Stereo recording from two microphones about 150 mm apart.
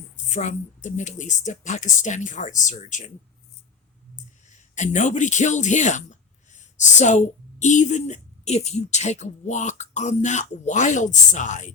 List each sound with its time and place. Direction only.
0.3 s a woman's voice: 55° left (ahead or behind)
4.5 s speech: 55° left (ahead or behind)